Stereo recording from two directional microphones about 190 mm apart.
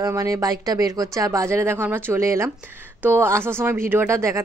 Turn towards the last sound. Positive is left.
turn(degrees=-15)  # may be behind; listen again after turning